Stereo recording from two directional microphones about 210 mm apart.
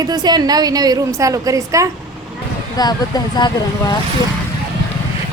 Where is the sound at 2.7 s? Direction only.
20° left (ahead or behind).